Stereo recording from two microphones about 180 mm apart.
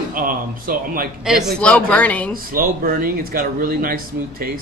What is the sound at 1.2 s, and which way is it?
Speech, centre (ahead or behind).